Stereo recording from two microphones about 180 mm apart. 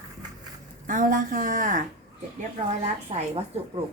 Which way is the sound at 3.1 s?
35° right (ahead or behind).